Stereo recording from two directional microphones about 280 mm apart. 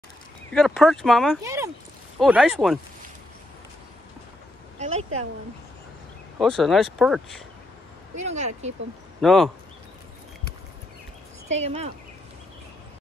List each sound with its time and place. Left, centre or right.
0.5 s speech: centre
4.7 s a sound: right
6.4 s speech: centre
8.2 s speech: right
9.2 s speech: centre
11.6 s speech: right